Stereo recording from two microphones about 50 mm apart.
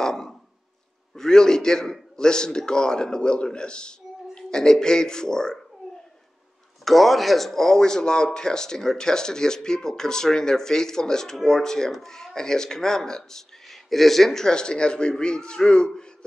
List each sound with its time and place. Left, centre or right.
0.0 s a sound: centre
1.1 s speech: centre
6.8 s speech: centre